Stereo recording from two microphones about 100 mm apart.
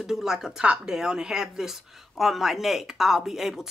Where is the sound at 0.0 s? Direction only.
5° right (ahead or behind).